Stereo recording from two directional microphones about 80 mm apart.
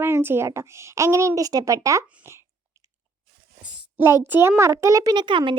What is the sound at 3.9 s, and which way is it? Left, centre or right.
Speech, right.